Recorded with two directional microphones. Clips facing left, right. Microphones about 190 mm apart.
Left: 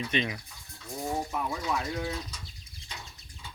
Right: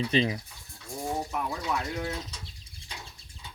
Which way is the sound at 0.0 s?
30° right (ahead or behind).